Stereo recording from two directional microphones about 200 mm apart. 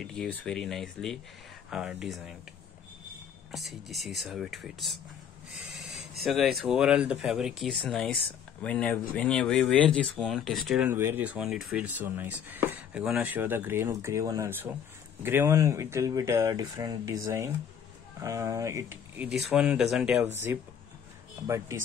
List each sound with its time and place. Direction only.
0.0 s speech: centre (ahead or behind)
3.5 s speech: centre (ahead or behind)
21.5 s speech: 15° right (ahead or behind)